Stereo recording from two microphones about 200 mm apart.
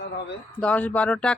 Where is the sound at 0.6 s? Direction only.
5° left (ahead or behind).